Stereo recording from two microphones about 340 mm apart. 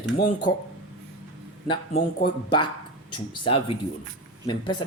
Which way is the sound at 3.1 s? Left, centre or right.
Centre.